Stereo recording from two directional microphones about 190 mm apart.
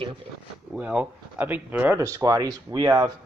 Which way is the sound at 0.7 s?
5° right (ahead or behind).